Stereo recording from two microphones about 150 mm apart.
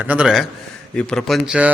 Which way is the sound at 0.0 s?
10° right (ahead or behind).